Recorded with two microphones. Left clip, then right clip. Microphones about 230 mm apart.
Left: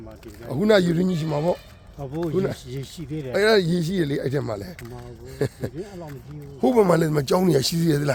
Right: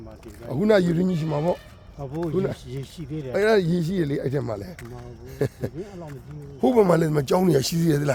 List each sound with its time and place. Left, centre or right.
0.4 s speech: centre
2.6 s speech: left
3.3 s a man's voice: centre